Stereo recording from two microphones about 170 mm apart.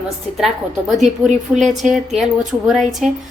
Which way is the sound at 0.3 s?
Centre (ahead or behind).